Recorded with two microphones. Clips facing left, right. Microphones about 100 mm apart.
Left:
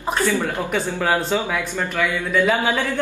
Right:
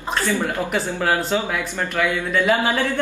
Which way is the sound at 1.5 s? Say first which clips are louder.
Even; 15° right (ahead or behind).